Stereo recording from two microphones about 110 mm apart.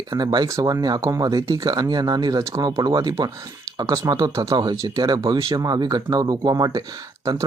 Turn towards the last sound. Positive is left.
turn(degrees=-30)  # may be behind; listen again after turning